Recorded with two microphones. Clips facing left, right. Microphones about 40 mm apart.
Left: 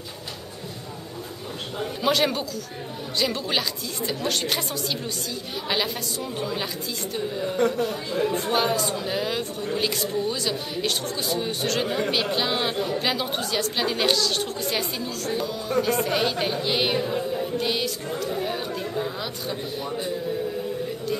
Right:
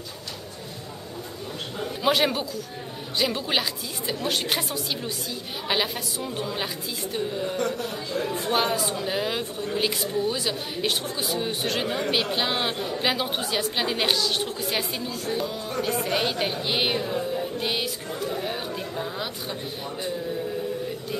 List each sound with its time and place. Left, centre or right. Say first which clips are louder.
2.0 s a woman's voice: even; centre
7.5 s speech: left 4 dB; centre
8.4 s a woman's voice: left 1 dB; centre
17.1 s music: left 1 dB; centre
17.6 s music: left 2 dB; centre
18.3 s speech: left 2 dB; centre